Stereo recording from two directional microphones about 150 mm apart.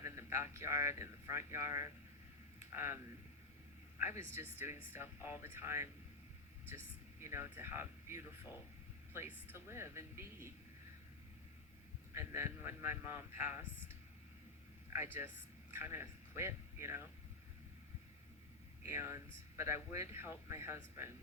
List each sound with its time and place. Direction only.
0.0 s a sound: 15° right (ahead or behind)
0.5 s speech: 15° right (ahead or behind)
4.2 s speech: 15° right (ahead or behind)
12.1 s speech: 15° right (ahead or behind)
14.9 s speech: 15° right (ahead or behind)
18.9 s speech: 15° right (ahead or behind)